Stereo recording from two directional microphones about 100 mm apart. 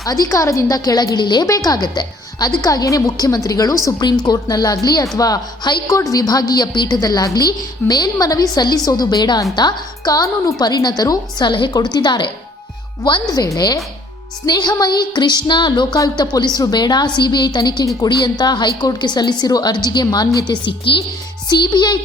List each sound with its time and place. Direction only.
0.0 s a woman's voice: 35° left (ahead or behind)
13.3 s a woman's voice: 40° left (ahead or behind)
20.7 s a woman's voice: 60° left (ahead or behind)